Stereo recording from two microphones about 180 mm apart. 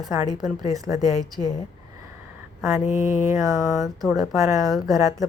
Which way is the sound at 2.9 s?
15° right (ahead or behind).